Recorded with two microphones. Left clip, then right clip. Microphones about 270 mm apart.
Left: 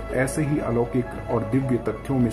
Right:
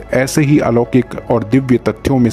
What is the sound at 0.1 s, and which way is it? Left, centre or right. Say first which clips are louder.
Speech: right 11 dB; right.